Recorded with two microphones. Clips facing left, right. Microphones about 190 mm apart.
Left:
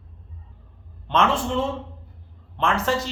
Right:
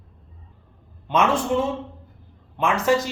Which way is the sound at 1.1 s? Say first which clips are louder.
Right 2 dB; 15° right (ahead or behind).